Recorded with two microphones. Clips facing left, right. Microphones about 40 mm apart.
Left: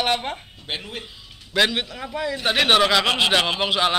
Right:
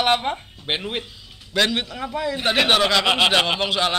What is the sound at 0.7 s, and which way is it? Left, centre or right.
Speech, right.